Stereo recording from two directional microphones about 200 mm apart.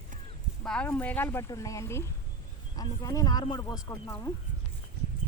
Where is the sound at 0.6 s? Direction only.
5° left (ahead or behind).